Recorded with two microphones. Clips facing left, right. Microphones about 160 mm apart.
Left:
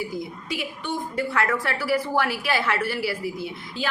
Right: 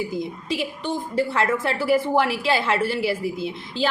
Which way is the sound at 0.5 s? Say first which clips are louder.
Right 3 dB; 30° right (ahead or behind).